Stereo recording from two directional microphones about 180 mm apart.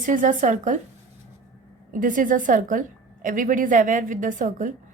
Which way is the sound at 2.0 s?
45° right (ahead or behind).